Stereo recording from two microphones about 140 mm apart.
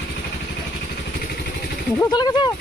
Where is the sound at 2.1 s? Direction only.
30° left (ahead or behind).